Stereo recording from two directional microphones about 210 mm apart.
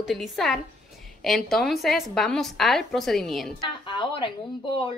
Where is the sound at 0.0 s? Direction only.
Centre (ahead or behind).